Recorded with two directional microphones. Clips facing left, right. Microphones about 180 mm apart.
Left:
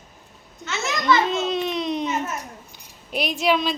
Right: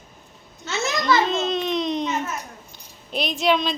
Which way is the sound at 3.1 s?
10° left (ahead or behind).